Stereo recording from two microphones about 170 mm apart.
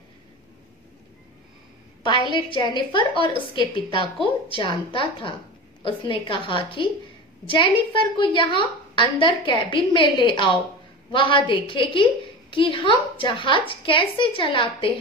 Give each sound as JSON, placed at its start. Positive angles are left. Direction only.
{"t": 2.0, "sound": "a woman's voice", "side_deg": 30}